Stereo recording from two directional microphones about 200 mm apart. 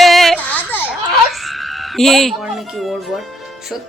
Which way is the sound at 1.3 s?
Centre (ahead or behind).